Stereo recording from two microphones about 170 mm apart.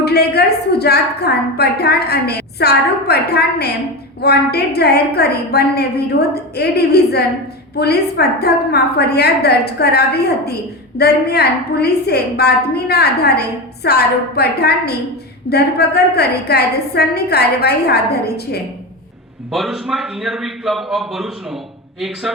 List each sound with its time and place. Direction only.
0.0 s a woman's voice: 70° left (ahead or behind)
19.5 s a man's voice: centre (ahead or behind)